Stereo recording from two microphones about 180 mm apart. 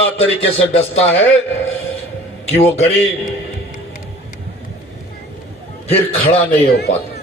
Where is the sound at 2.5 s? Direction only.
35° left (ahead or behind).